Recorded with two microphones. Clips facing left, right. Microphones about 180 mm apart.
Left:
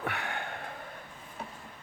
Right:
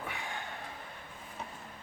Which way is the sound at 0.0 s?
70° left (ahead or behind).